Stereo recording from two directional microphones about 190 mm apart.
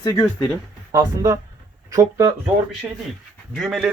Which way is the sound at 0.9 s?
20° right (ahead or behind).